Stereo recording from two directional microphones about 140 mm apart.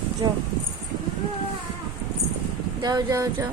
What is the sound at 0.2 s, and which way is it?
Speech, 30° right (ahead or behind).